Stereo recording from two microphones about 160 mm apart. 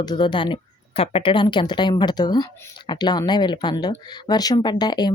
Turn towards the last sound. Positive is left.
turn(degrees=25)  # may be behind; listen again after turning